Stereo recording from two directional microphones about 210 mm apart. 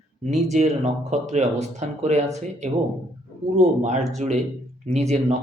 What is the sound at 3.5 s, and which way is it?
Speech, 30° right (ahead or behind).